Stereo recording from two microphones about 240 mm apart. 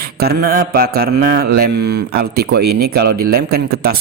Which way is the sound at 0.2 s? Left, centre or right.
Right.